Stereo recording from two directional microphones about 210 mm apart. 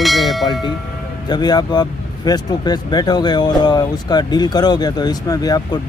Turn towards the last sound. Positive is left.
turn(degrees=20)  # may be behind; listen again after turning